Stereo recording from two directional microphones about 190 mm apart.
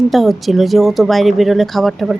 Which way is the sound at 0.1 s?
Centre (ahead or behind).